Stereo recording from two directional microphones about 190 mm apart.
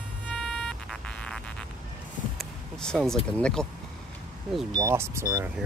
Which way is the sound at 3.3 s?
5° left (ahead or behind).